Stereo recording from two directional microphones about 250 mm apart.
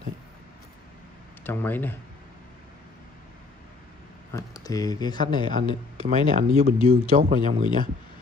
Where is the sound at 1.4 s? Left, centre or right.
Centre.